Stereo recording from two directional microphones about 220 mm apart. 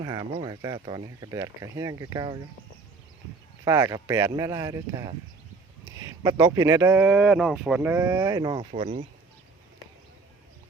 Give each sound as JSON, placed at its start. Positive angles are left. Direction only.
{"t": 0.0, "sound": "speech", "side_deg": -15}
{"t": 3.6, "sound": "speech", "side_deg": -15}
{"t": 8.7, "sound": "speech", "side_deg": -30}